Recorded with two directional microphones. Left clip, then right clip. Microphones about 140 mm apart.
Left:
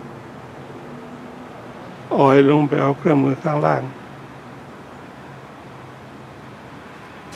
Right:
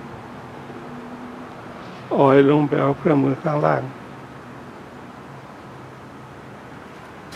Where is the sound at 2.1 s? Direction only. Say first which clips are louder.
Left 1 dB; 20° left (ahead or behind).